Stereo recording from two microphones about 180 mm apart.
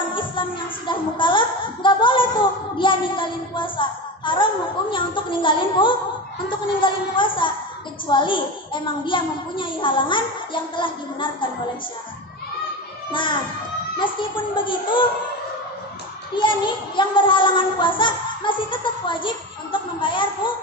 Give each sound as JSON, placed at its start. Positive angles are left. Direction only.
{"t": 0.1, "sound": "music", "side_deg": 25}
{"t": 0.9, "sound": "a sound", "side_deg": 25}
{"t": 4.9, "sound": "a woman's voice", "side_deg": 25}
{"t": 13.1, "sound": "a woman's voice", "side_deg": 25}
{"t": 16.3, "sound": "a woman's voice", "side_deg": 25}